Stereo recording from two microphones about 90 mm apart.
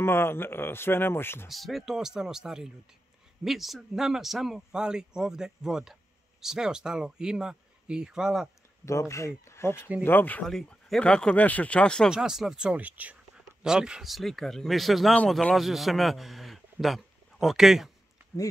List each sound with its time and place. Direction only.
0.0 s speech: 25° left (ahead or behind)
1.5 s speech: centre (ahead or behind)
8.8 s speech: 35° left (ahead or behind)
10.4 s speech: 5° left (ahead or behind)
12.1 s a man's voice: 5° right (ahead or behind)